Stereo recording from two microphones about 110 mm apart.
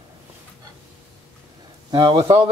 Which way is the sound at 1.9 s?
35° right (ahead or behind).